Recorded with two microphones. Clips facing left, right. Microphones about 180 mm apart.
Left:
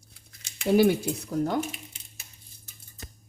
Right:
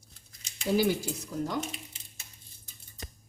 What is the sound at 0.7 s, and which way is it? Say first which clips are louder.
Speech: left 6 dB; 60° left (ahead or behind).